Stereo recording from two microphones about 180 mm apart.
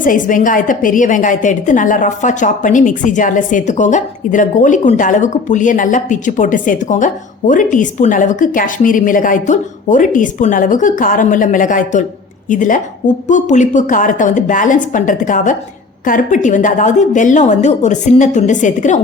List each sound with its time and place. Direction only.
0.0 s a woman's voice: 50° left (ahead or behind)